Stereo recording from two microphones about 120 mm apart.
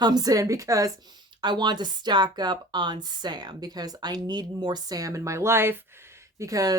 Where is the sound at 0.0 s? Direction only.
35° right (ahead or behind).